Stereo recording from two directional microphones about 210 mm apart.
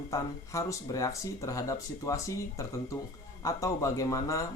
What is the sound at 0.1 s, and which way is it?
Speech, 15° left (ahead or behind).